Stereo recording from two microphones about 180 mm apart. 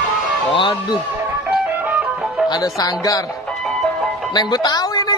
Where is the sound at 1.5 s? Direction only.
10° right (ahead or behind).